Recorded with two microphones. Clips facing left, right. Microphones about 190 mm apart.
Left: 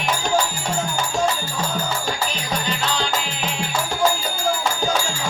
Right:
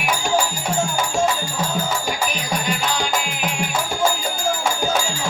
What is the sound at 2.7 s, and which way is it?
Music, 10° right (ahead or behind).